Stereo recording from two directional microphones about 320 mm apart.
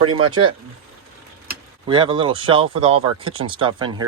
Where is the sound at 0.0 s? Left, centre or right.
Centre.